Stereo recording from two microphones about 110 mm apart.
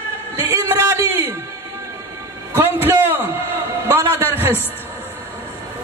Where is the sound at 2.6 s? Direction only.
20° right (ahead or behind).